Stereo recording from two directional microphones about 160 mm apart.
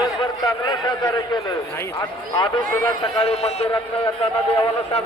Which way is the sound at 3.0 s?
40° left (ahead or behind).